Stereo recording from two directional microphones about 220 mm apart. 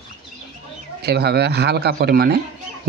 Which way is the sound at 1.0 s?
45° right (ahead or behind).